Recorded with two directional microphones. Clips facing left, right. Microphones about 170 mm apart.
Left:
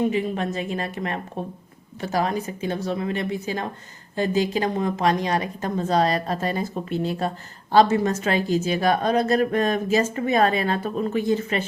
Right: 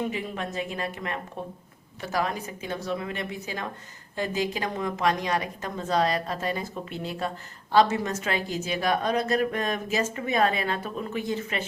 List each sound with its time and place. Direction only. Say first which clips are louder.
0.1 s a woman's voice: left 7 dB; 25° left (ahead or behind)